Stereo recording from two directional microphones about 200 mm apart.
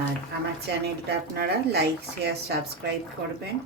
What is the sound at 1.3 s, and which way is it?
A woman's voice, 55° right (ahead or behind).